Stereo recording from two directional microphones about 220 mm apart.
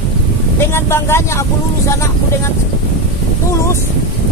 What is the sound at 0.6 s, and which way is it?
Speech, 10° left (ahead or behind).